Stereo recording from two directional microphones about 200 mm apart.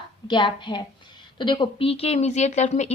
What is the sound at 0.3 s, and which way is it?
A woman's voice, 20° left (ahead or behind).